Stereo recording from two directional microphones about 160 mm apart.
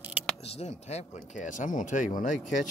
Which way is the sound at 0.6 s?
45° left (ahead or behind).